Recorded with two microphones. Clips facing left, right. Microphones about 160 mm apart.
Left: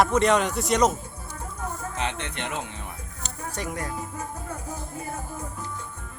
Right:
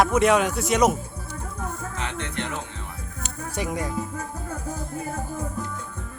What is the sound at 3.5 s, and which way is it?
Speech, 15° right (ahead or behind).